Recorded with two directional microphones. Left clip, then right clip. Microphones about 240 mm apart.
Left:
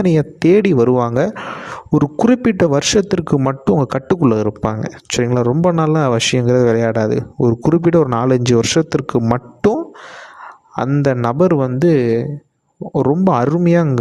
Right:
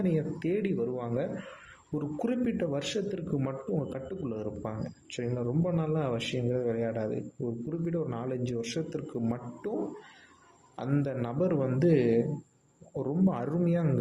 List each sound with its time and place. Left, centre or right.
0.0 s a man's voice: left
10.8 s a man's voice: left